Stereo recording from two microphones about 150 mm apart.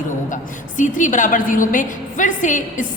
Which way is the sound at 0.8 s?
60° left (ahead or behind).